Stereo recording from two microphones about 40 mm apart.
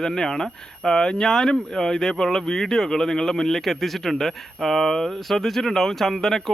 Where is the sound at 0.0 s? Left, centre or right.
Centre.